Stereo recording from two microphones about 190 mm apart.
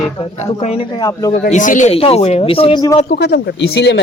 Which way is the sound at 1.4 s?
45° left (ahead or behind).